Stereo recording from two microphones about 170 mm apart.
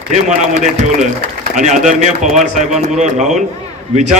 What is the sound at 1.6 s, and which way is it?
A man's voice, 45° right (ahead or behind).